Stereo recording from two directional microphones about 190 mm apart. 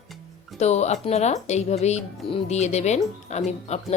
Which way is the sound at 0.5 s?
35° left (ahead or behind).